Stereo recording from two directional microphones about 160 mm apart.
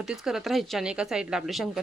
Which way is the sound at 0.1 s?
Centre (ahead or behind).